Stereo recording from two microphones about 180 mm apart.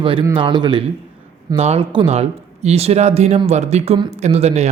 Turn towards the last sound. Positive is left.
turn(degrees=-40)  # may be behind; listen again after turning